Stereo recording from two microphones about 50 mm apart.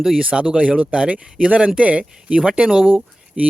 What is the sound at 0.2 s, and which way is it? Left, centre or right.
Speech, right.